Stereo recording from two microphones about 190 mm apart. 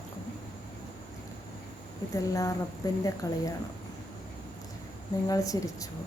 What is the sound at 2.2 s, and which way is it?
Speech, 15° left (ahead or behind).